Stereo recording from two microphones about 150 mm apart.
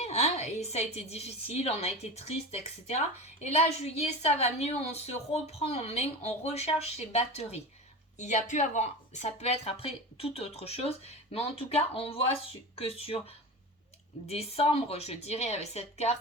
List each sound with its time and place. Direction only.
0.0 s a woman's voice: 45° left (ahead or behind)